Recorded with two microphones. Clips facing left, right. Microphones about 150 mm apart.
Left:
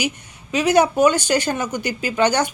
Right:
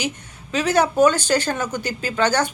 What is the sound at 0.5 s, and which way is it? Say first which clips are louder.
A woman's voice: left 2 dB; 15° left (ahead or behind).